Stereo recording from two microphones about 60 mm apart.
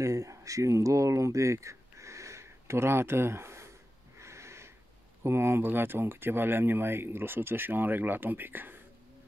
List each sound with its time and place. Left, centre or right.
0.0 s speech: right
4.2 s wheeze: right
5.2 s speech: right